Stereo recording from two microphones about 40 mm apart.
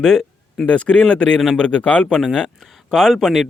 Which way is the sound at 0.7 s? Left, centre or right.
Left.